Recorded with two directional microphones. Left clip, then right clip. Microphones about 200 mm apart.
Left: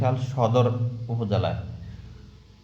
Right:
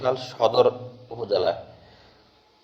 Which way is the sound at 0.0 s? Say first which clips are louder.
Right 3 dB; 35° right (ahead or behind).